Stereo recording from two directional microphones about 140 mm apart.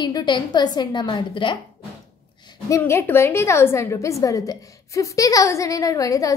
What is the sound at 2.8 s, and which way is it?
A woman's voice, 15° left (ahead or behind).